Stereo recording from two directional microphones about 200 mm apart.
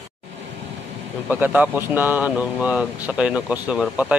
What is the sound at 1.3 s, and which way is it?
Speech, 10° right (ahead or behind).